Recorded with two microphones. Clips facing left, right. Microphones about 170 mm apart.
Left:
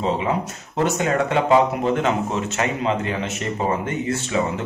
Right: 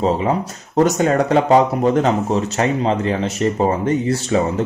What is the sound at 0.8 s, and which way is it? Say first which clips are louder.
Speech: right 2 dB; 40° right (ahead or behind).